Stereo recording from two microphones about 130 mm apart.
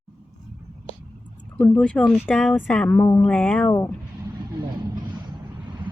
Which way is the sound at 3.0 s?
25° left (ahead or behind).